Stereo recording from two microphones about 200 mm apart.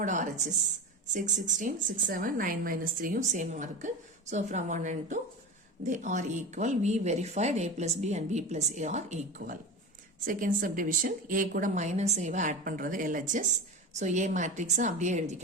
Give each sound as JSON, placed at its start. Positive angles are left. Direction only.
{"t": 0.0, "sound": "a woman's voice", "side_deg": -40}